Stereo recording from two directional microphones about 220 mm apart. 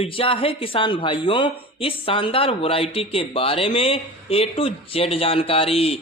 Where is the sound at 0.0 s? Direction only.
25° left (ahead or behind).